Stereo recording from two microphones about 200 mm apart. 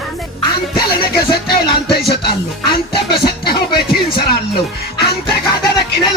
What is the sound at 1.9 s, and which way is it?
Music, 55° left (ahead or behind).